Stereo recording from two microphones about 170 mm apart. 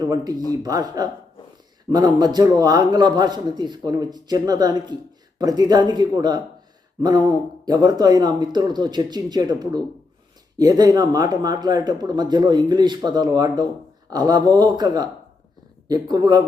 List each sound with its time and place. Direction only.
0.0 s a man's voice: 25° right (ahead or behind)